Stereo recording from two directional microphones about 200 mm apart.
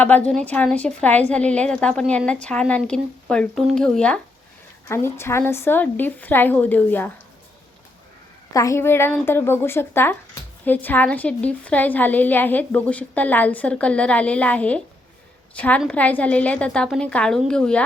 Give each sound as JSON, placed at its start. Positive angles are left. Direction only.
{"t": 0.0, "sound": "a woman's voice", "side_deg": 5}
{"t": 8.5, "sound": "a woman's voice", "side_deg": 15}